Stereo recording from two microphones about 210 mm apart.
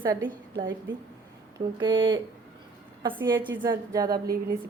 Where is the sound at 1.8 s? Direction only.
25° right (ahead or behind).